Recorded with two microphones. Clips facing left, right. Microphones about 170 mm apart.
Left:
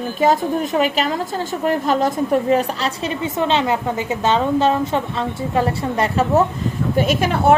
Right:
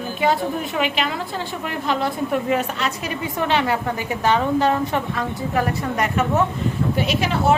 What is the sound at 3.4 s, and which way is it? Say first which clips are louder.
A woman's voice: left 2 dB; 20° left (ahead or behind).